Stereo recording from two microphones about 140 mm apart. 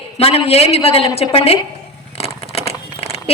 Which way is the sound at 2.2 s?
45° left (ahead or behind).